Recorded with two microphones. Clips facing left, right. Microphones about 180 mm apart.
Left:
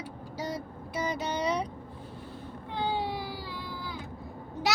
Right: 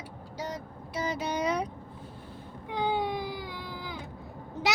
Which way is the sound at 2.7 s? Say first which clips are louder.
Right 2 dB; 15° right (ahead or behind).